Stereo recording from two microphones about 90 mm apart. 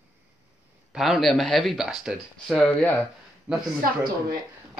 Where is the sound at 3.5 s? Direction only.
15° right (ahead or behind).